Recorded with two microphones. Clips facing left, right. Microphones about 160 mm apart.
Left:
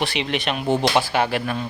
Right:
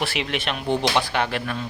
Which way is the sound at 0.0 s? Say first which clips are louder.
Left 2 dB; centre (ahead or behind).